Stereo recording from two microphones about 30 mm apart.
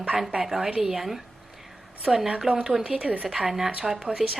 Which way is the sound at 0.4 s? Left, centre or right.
Centre.